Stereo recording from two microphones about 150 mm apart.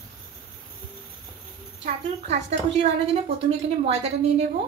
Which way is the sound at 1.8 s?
45° right (ahead or behind).